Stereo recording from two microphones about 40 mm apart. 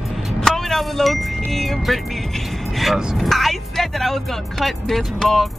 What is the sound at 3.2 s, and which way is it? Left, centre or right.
Speech, centre.